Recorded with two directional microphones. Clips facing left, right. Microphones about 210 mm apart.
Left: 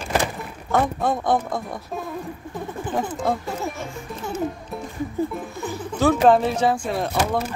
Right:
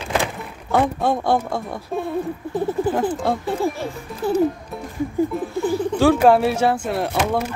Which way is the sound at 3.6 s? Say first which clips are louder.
Right 6 dB; 35° right (ahead or behind).